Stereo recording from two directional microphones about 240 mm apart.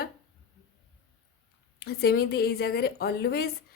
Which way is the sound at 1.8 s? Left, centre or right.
Left.